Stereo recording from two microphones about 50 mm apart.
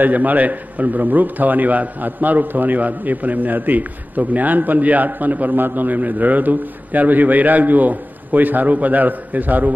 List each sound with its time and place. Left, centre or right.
0.0 s a man's voice: right